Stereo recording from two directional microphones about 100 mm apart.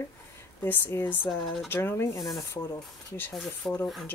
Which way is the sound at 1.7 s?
25° left (ahead or behind).